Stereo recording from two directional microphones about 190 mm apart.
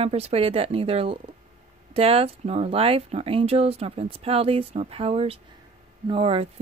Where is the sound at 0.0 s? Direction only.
35° right (ahead or behind).